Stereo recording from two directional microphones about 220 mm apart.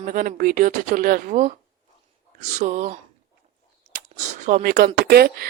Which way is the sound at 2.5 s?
35° right (ahead or behind).